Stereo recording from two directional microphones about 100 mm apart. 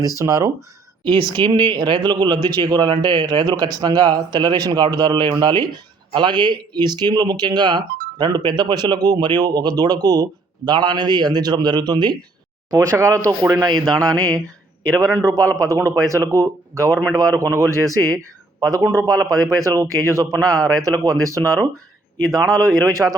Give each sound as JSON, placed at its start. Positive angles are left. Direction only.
{"t": 0.2, "sound": "speech", "side_deg": -35}
{"t": 1.0, "sound": "speech", "side_deg": -50}
{"t": 12.7, "sound": "speech", "side_deg": -35}
{"t": 13.8, "sound": "mantra", "side_deg": 5}
{"t": 15.0, "sound": "speech", "side_deg": -30}
{"t": 19.3, "sound": "speech", "side_deg": -35}